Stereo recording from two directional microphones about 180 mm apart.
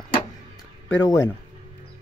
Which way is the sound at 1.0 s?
15° left (ahead or behind).